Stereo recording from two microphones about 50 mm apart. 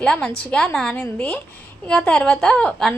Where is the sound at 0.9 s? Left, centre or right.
Left.